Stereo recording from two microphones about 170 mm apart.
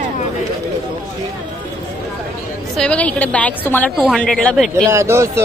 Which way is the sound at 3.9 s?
5° right (ahead or behind).